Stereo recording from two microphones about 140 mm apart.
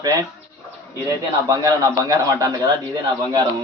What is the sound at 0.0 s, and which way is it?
Speech, 25° right (ahead or behind).